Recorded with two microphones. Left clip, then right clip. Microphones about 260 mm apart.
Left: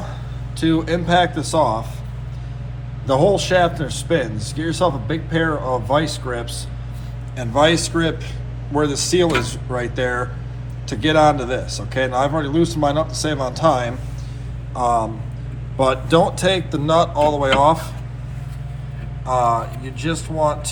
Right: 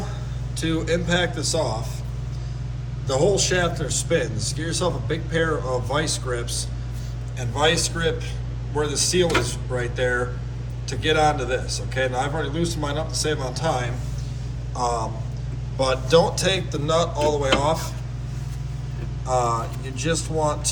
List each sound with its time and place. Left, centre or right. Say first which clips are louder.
0.6 s a man's voice: left 5 dB; centre
3.1 s a man's voice: left 5 dB; centre
7.3 s speech: left 5 dB; centre
14.8 s a man's voice: left 6 dB; centre
19.2 s a man's voice: left 5 dB; centre